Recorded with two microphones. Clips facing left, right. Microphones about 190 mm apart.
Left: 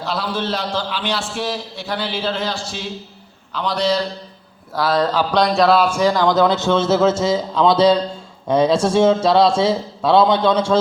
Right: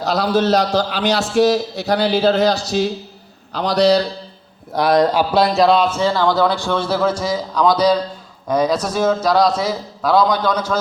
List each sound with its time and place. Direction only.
0.0 s a man's voice: 40° right (ahead or behind)
4.7 s speech: 15° right (ahead or behind); by 10.8 s 25° left (ahead or behind)